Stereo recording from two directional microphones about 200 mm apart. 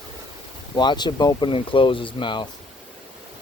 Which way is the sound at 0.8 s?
20° left (ahead or behind).